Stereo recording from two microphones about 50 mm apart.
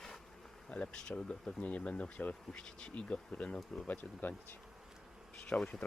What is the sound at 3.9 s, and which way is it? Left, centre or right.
Speech, left.